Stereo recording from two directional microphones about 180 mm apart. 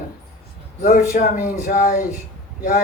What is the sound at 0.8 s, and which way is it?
Speech, 55° left (ahead or behind).